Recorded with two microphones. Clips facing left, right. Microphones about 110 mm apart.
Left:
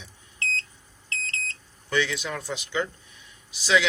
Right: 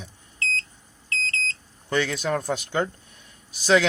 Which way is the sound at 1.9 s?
45° right (ahead or behind).